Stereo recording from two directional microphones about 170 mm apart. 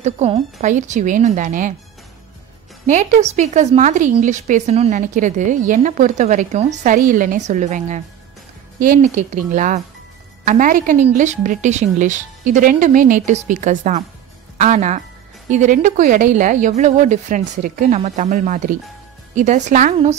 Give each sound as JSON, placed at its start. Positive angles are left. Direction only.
{"t": 0.0, "sound": "speech", "side_deg": -40}
{"t": 2.9, "sound": "speech", "side_deg": -45}